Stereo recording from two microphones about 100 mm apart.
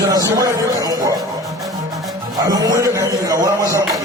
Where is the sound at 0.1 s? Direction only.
35° right (ahead or behind).